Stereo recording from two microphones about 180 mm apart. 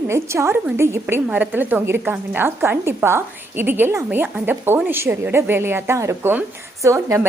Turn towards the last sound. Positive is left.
turn(degrees=-15)  # may be behind; listen again after turning